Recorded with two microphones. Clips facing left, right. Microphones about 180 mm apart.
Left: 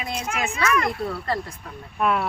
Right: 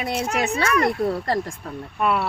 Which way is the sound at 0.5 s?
35° right (ahead or behind).